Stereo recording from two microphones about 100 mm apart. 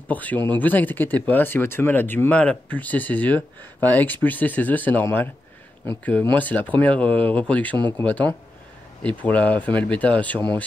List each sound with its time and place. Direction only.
0.1 s speech: 15° left (ahead or behind)